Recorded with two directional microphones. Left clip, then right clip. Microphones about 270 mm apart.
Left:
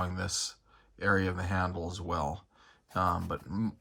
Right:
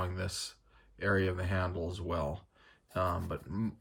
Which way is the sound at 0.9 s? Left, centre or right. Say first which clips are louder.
Left 2 dB; centre.